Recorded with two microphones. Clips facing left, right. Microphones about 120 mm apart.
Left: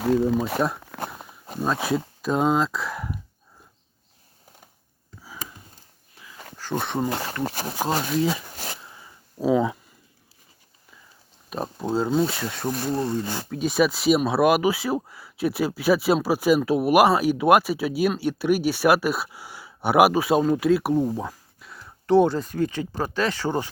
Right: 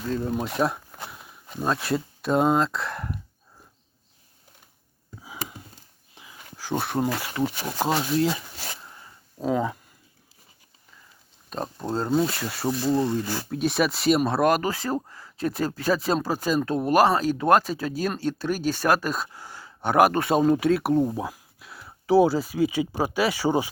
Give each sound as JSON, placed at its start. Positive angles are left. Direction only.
{"t": 0.0, "sound": "speech", "side_deg": 80}
{"t": 1.0, "sound": "walk", "side_deg": 50}
{"t": 1.8, "sound": "speech", "side_deg": 0}
{"t": 6.2, "sound": "a sound", "side_deg": -20}
{"t": 6.6, "sound": "speech", "side_deg": -5}
{"t": 7.1, "sound": "speech", "side_deg": 40}
{"t": 8.1, "sound": "speech", "side_deg": 0}
{"t": 8.5, "sound": "a sound", "side_deg": 40}
{"t": 8.8, "sound": "a sound", "side_deg": 5}
{"t": 11.4, "sound": "speech", "side_deg": 5}